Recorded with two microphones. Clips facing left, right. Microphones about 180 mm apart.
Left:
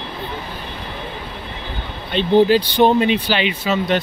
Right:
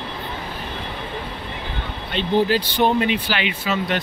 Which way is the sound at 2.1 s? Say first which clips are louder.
Left 6 dB; 20° left (ahead or behind).